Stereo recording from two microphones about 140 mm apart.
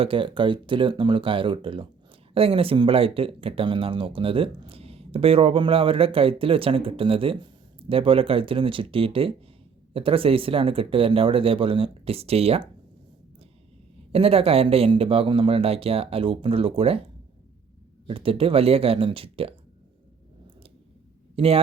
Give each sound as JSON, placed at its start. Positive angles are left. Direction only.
{"t": 0.0, "sound": "speech", "side_deg": -40}
{"t": 14.1, "sound": "speech", "side_deg": -45}
{"t": 18.1, "sound": "speech", "side_deg": -40}
{"t": 21.3, "sound": "speech", "side_deg": -45}